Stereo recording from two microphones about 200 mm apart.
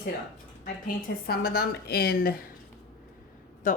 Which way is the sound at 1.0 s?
50° left (ahead or behind).